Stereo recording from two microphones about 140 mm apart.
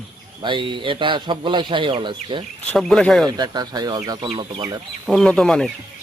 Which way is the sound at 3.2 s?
30° right (ahead or behind).